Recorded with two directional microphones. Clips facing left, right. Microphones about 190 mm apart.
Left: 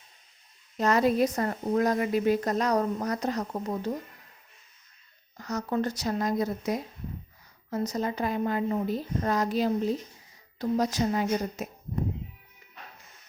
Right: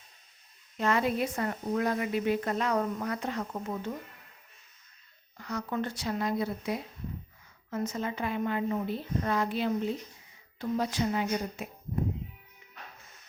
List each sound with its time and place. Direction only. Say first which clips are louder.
0.8 s a woman's voice: left 5 dB; 40° left (ahead or behind)
5.4 s a woman's voice: left 4 dB; 40° left (ahead or behind)